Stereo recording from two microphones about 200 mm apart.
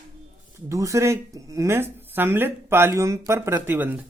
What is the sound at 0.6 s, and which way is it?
Speech, 15° right (ahead or behind).